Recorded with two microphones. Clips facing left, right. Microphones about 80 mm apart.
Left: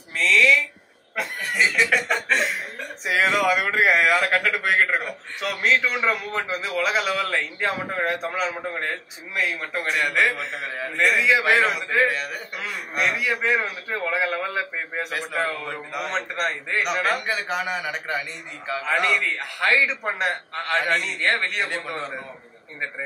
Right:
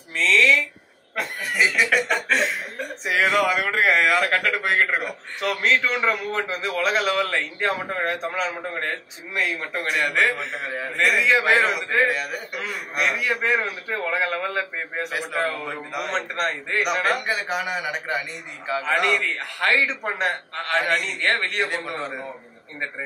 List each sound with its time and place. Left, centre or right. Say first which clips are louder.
0.2 s a man's voice: even; centre
3.6 s a man's voice: left 1 dB; centre
4.1 s a man's voice: even; centre